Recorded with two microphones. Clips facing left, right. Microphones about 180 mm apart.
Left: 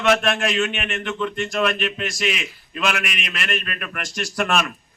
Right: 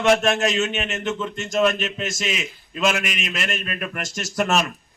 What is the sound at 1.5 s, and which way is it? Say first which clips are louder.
Speech: right 5 dB; 45° right (ahead or behind).